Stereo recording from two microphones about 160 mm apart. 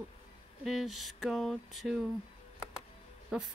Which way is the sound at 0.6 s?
Centre (ahead or behind).